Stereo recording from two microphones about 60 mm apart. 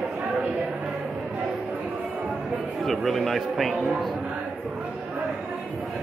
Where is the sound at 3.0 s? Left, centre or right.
Centre.